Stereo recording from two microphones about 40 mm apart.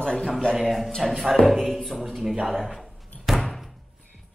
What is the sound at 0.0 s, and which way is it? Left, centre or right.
Speech, centre.